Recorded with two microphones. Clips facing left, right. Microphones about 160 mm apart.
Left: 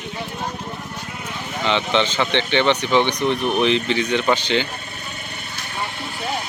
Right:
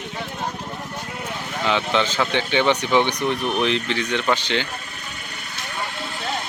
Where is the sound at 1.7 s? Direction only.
5° right (ahead or behind).